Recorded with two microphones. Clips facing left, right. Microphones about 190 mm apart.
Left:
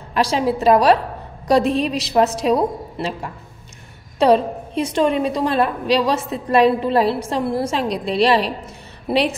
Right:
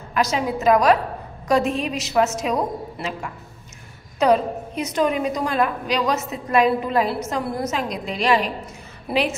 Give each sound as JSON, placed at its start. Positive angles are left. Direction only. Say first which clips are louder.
{"t": 0.1, "sound": "a woman's voice", "louder": "left 3 dB", "side_deg": 30}